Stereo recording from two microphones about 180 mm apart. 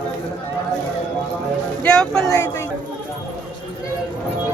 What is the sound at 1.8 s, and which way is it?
Speech, 5° left (ahead or behind).